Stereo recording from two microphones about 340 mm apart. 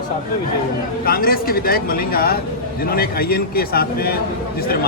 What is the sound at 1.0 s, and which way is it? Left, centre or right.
A man's voice, left.